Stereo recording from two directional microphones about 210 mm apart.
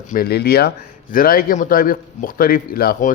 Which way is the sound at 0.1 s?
45° left (ahead or behind).